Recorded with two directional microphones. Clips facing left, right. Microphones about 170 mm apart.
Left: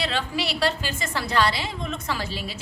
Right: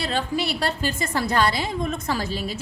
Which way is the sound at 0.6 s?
45° right (ahead or behind).